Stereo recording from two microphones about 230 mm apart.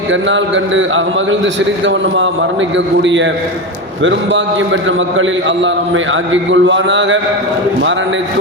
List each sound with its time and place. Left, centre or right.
0.1 s a man's voice: right